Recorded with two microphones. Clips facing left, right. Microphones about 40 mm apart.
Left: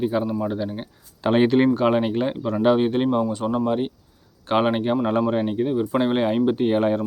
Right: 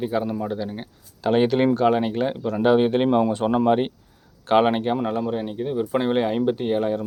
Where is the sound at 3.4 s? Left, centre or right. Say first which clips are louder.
Right 3 dB; right.